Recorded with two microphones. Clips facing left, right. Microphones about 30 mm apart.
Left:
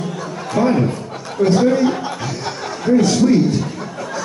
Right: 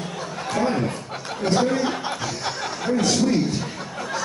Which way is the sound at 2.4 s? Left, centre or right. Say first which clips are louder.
Left 3 dB; centre.